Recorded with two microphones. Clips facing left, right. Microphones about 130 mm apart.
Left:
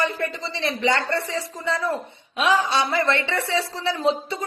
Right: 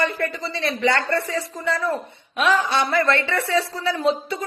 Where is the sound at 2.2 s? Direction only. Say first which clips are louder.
Right 2 dB; 55° right (ahead or behind).